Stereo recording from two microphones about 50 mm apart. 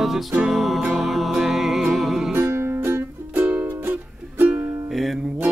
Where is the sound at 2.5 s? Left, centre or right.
Right.